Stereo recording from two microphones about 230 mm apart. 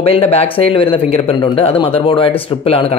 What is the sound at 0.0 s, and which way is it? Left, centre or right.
Speech, left.